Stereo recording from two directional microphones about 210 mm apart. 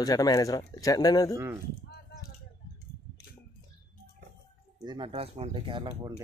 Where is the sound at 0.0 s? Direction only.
15° left (ahead or behind).